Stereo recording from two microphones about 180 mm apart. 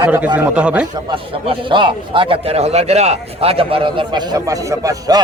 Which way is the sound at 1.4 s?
30° right (ahead or behind).